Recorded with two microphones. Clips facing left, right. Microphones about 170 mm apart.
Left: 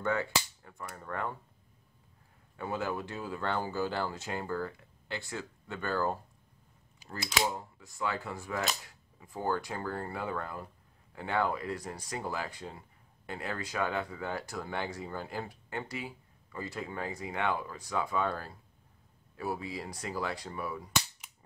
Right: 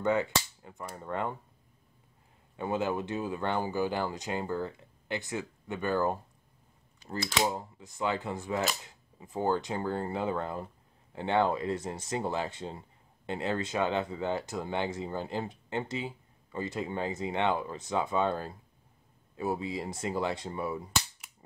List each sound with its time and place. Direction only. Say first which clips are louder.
0.0 s cap gun: right 4 dB; 20° right (ahead or behind)
2.5 s speech: right 4 dB; 20° right (ahead or behind)
7.1 s speech: right 3 dB; 30° right (ahead or behind)